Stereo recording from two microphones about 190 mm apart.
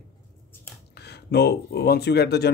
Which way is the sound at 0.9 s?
60° left (ahead or behind).